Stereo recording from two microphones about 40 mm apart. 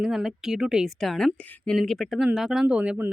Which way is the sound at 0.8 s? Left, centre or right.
Centre.